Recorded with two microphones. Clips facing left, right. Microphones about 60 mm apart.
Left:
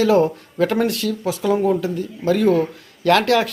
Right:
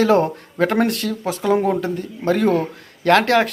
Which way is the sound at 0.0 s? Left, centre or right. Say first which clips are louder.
Even; right.